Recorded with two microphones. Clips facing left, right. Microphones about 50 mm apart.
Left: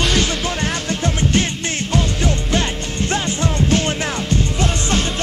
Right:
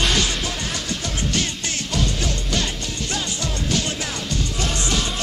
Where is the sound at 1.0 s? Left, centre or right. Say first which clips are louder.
Left 8 dB; left.